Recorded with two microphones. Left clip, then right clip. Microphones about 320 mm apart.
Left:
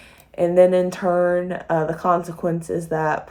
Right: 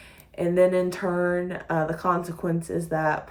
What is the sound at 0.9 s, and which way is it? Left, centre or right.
Speech, centre.